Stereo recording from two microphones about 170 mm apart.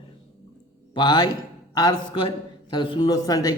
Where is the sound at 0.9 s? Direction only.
25° left (ahead or behind).